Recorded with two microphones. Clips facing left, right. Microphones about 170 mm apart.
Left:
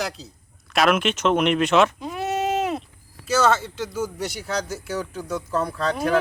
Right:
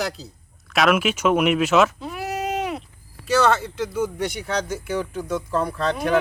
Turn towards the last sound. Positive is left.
turn(degrees=0)  # may be behind; listen again after turning